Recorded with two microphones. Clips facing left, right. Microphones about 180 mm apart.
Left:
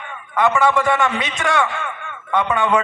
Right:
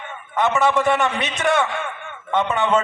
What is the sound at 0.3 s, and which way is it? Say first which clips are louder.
Speech: left 2 dB; 20° right (ahead or behind).